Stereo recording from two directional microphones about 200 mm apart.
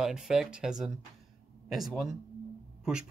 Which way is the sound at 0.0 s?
5° right (ahead or behind).